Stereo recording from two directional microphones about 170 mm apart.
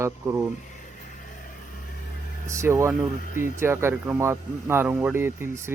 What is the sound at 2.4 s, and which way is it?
Speech, 15° right (ahead or behind).